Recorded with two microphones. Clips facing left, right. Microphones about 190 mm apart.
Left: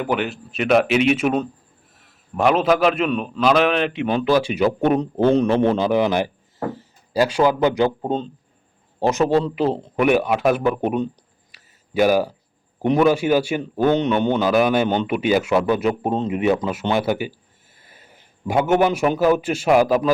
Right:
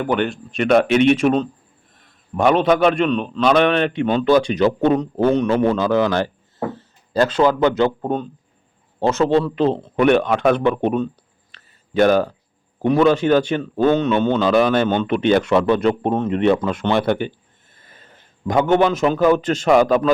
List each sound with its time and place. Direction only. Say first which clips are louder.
0.0 s a man's voice: right 3 dB; 5° left (ahead or behind)
4.9 s a man's voice: even; 30° left (ahead or behind); by 11.0 s 5° left (ahead or behind)
11.5 s a sound: right 2 dB; 10° left (ahead or behind)
12.8 s a man's voice: right 2 dB; 15° left (ahead or behind)